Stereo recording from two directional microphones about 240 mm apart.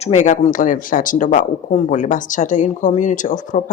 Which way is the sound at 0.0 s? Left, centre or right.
Left.